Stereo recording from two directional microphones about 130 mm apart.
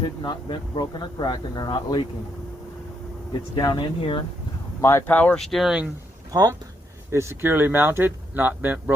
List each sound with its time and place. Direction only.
0.2 s speech: 35° left (ahead or behind)
3.6 s speech: 35° left (ahead or behind)
4.8 s speech: 20° left (ahead or behind); by 5.9 s 5° right (ahead or behind)
6.3 s speech: 25° right (ahead or behind)